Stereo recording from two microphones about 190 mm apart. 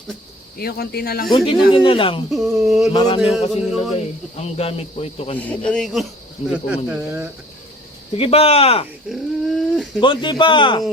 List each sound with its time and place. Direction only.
0.6 s speech: 55° left (ahead or behind)
1.5 s speech: 25° left (ahead or behind)
2.3 s speech: centre (ahead or behind)
2.9 s speech: 25° left (ahead or behind)
3.5 s speech: centre (ahead or behind)
4.4 s speech: 35° left (ahead or behind)
5.4 s speech: 5° left (ahead or behind); by 7.3 s 10° right (ahead or behind)
8.2 s speech: 30° left (ahead or behind)
9.0 s dog: centre (ahead or behind)
10.0 s speech: 25° left (ahead or behind)